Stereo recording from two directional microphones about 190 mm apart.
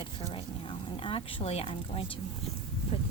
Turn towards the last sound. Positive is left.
turn(degrees=30)  # may be behind; listen again after turning